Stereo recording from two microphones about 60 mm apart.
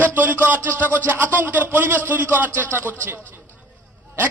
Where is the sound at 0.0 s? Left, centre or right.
Right.